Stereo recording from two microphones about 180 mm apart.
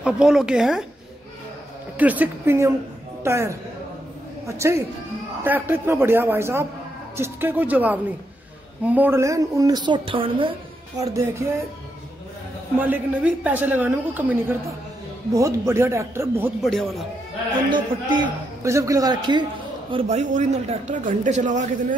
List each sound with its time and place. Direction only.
0.0 s a woman's voice: 5° right (ahead or behind)
2.0 s a woman's voice: 10° right (ahead or behind); by 10.5 s 30° right (ahead or behind)
11.0 s a woman's voice: 15° right (ahead or behind)
12.8 s a woman's voice: 10° right (ahead or behind)
16.6 s a woman's voice: centre (ahead or behind)
17.6 s a man's voice: 25° right (ahead or behind)
19.9 s speech: 35° right (ahead or behind)